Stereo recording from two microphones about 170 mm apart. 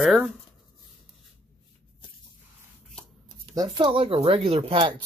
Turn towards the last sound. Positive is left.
turn(degrees=-30)  # may be behind; listen again after turning